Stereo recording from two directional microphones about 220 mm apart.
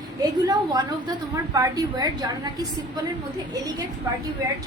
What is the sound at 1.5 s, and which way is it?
Speech, 15° right (ahead or behind).